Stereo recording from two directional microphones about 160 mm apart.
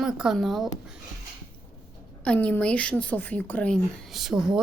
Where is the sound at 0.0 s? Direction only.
5° right (ahead or behind).